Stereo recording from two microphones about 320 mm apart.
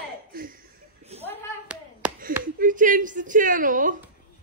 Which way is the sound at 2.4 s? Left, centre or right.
Right.